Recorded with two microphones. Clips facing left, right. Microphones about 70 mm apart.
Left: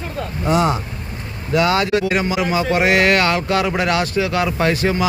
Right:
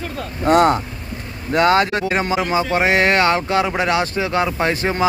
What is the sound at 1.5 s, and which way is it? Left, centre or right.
Speech, right.